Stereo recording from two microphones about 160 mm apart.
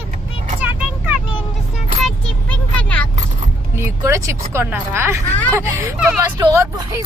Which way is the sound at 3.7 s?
15° right (ahead or behind).